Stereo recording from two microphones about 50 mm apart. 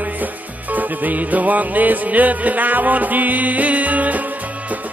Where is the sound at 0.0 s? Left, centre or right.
Right.